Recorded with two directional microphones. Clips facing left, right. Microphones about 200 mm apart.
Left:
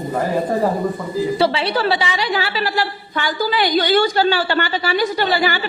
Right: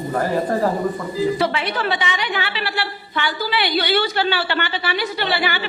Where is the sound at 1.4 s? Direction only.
30° left (ahead or behind).